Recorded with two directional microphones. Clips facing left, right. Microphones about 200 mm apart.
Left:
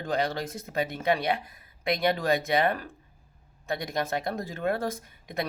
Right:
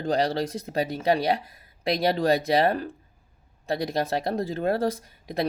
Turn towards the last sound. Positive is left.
turn(degrees=-35)  # may be behind; listen again after turning